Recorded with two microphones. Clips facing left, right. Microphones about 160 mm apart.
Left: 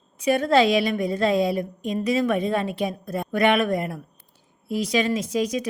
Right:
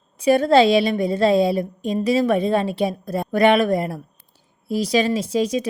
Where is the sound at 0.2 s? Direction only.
35° right (ahead or behind).